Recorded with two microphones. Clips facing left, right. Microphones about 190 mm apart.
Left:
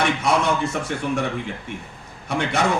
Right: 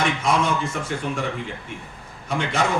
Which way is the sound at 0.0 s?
70° left (ahead or behind).